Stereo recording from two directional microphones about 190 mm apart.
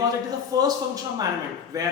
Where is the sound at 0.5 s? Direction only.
20° right (ahead or behind).